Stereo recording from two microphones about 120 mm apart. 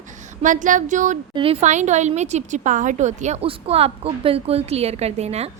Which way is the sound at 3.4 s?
55° right (ahead or behind).